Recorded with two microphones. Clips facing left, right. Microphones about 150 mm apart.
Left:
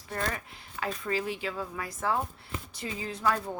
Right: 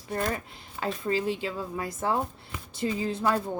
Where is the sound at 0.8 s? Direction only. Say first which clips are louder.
Right 3 dB; 25° right (ahead or behind).